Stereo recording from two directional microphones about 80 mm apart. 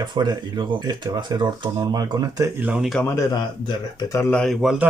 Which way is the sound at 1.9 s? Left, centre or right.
Right.